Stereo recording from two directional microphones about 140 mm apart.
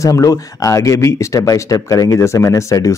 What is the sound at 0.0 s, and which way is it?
Speech, 25° left (ahead or behind).